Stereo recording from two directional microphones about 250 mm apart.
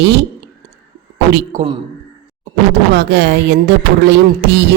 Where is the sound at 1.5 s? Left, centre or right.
Right.